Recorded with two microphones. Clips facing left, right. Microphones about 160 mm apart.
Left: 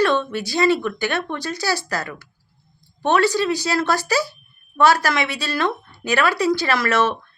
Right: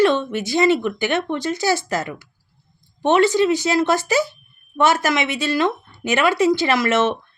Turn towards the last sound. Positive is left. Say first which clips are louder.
# right 2 dB
turn(degrees=-20)  # may be behind; listen again after turning